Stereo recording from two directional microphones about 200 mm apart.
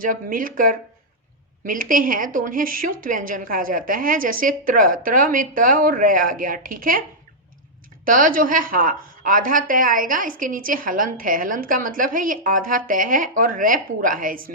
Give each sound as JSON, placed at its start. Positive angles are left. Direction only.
{"t": 0.0, "sound": "a woman's voice", "side_deg": -45}
{"t": 8.0, "sound": "a woman's voice", "side_deg": -45}